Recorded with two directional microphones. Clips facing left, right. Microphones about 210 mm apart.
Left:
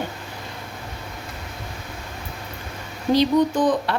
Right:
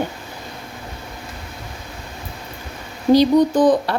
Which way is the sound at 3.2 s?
35° right (ahead or behind).